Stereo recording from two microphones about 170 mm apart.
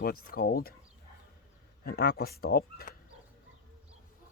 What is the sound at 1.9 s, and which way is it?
Speech, 65° left (ahead or behind).